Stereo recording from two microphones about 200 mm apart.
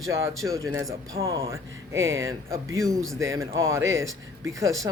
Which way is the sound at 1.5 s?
15° right (ahead or behind).